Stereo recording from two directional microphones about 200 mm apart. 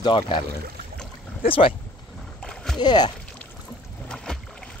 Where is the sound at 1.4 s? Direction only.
25° left (ahead or behind).